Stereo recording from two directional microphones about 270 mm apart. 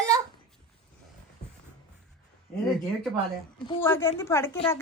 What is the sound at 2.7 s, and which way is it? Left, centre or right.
Speech, centre.